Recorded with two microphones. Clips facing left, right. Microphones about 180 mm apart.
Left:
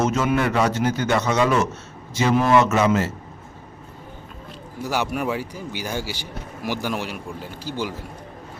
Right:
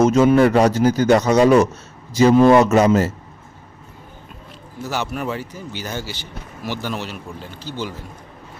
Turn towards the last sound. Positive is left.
turn(degrees=10)  # may be behind; listen again after turning